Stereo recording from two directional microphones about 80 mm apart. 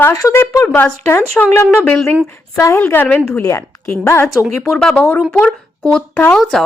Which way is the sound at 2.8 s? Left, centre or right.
Left.